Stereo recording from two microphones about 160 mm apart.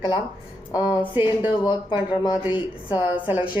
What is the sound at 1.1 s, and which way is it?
Speech, 10° right (ahead or behind).